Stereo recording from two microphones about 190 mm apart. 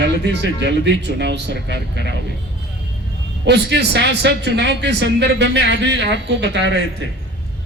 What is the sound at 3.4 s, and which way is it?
A man's voice, 65° right (ahead or behind).